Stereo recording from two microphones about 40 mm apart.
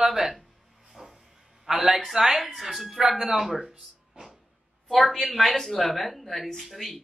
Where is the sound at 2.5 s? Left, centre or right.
Centre.